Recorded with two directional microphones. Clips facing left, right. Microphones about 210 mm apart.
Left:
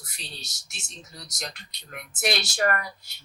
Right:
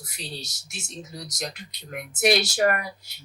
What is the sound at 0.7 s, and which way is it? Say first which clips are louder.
Speech: right 9 dB; 10° right (ahead or behind).